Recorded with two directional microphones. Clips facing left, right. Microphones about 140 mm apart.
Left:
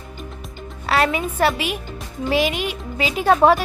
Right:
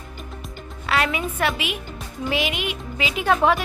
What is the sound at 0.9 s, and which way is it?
Speech, 40° left (ahead or behind).